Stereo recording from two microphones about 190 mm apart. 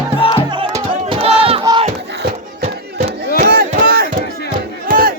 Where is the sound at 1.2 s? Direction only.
30° right (ahead or behind).